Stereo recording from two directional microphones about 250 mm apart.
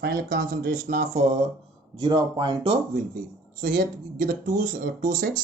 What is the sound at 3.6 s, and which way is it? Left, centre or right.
Speech, right.